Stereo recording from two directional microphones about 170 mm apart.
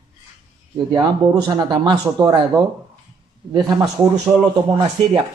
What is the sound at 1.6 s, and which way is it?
A man's voice, 20° right (ahead or behind).